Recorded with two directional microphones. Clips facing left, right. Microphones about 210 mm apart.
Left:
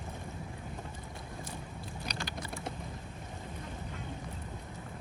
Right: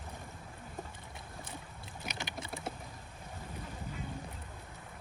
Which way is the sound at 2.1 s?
20° right (ahead or behind).